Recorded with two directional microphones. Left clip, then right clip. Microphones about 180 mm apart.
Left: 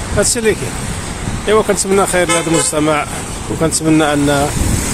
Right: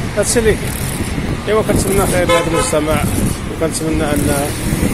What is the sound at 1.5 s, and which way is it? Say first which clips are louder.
Speech: left 3 dB; 45° left (ahead or behind).